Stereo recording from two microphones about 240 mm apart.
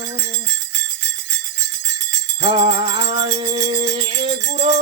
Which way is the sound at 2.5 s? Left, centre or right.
Right.